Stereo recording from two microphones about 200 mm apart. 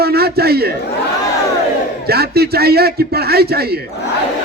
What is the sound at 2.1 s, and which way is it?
A man's voice, 50° right (ahead or behind).